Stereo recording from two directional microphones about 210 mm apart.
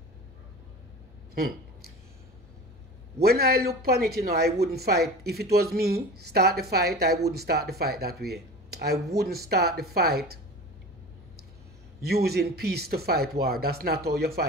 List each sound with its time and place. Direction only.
3.2 s speech: 50° right (ahead or behind)
12.1 s speech: 50° right (ahead or behind)